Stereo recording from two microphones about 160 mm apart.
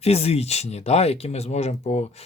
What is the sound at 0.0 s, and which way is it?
Speech, 40° left (ahead or behind).